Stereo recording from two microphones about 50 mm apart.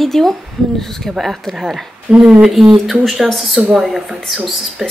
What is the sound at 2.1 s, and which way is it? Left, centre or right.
Speech, right.